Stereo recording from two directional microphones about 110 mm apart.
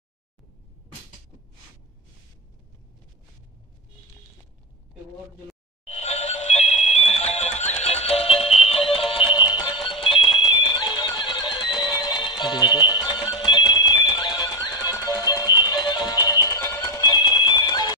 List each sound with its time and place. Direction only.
5.9 s music: 75° left (ahead or behind); by 9.0 s 60° left (ahead or behind)
9.1 s music: 45° left (ahead or behind)
9.8 s music: 55° left (ahead or behind)